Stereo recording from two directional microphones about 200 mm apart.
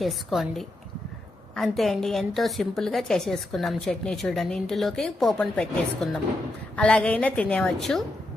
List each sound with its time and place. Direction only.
0.0 s a woman's voice: centre (ahead or behind)